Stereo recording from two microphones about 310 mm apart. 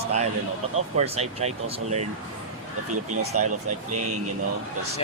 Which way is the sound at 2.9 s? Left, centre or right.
Right.